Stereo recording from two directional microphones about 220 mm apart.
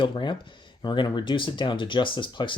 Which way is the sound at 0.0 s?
20° left (ahead or behind).